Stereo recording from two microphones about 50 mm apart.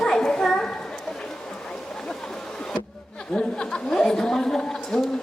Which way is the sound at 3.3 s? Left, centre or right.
Centre.